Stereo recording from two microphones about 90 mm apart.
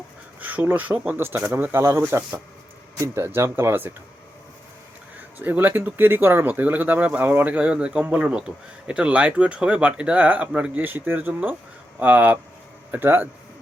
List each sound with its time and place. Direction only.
0.3 s speech: 20° right (ahead or behind)
5.4 s speech: 20° right (ahead or behind)